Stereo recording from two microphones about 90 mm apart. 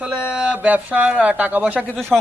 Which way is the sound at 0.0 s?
15° right (ahead or behind).